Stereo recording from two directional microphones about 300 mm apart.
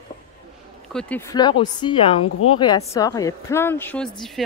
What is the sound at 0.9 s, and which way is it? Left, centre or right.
A woman's voice, centre.